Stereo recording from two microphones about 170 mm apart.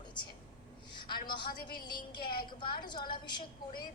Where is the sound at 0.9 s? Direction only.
25° left (ahead or behind).